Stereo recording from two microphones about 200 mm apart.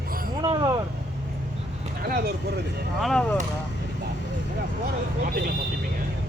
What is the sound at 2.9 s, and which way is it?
Speech, centre (ahead or behind).